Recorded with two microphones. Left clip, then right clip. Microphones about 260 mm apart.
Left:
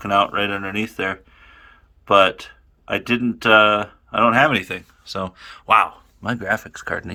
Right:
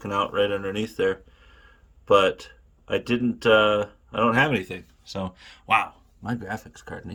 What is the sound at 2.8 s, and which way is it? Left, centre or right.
Speech, left.